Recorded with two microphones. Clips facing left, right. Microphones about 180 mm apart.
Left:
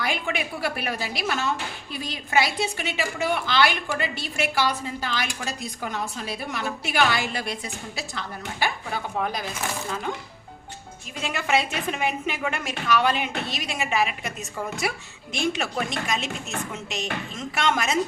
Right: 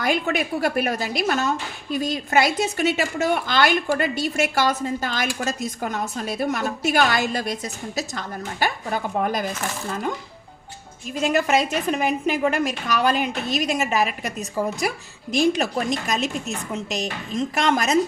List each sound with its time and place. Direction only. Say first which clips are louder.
0.0 s speech: right 5 dB; 45° right (ahead or behind)
11.2 s a woman's voice: right 5 dB; 40° right (ahead or behind)